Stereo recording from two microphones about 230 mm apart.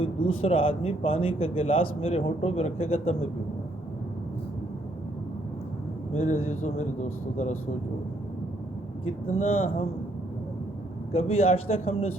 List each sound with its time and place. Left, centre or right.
0.3 s a man's voice: left
6.1 s a man's voice: left
9.0 s a man's voice: left
11.1 s a man's voice: left